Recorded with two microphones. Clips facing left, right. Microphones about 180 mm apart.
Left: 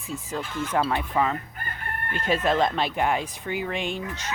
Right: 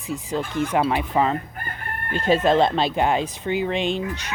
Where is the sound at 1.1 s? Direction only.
30° right (ahead or behind).